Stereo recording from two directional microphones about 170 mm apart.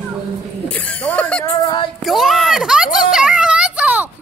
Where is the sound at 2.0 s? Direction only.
Centre (ahead or behind).